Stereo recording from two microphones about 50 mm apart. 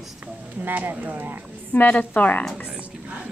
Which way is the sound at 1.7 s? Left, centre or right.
Left.